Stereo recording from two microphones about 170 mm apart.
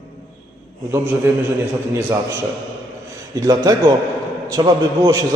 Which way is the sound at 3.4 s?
20° right (ahead or behind).